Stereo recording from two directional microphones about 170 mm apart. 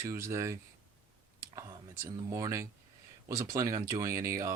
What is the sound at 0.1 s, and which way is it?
Speech, 15° right (ahead or behind).